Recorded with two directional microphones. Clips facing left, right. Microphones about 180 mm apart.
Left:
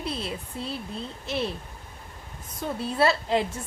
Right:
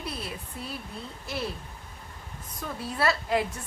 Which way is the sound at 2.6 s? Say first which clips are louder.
Left 6 dB; 25° left (ahead or behind).